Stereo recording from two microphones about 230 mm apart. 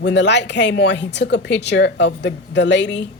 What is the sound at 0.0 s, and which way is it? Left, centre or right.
Speech, left.